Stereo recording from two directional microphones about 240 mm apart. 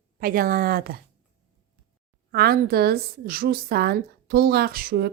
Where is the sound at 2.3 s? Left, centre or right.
Right.